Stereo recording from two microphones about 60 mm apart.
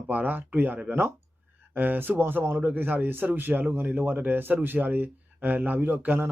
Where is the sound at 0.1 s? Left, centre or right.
Right.